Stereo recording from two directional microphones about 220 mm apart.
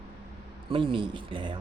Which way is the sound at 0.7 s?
25° right (ahead or behind).